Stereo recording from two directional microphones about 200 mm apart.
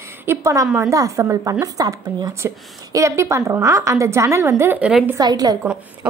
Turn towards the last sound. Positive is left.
turn(degrees=-20)  # may be behind; listen again after turning